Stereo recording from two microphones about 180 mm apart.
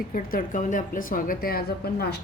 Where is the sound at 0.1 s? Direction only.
50° left (ahead or behind).